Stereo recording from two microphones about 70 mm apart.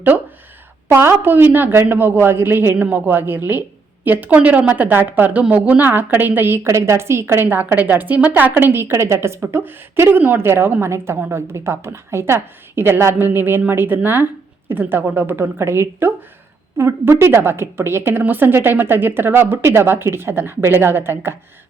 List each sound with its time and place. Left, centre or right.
0.9 s a woman's voice: right
6.7 s a woman's voice: right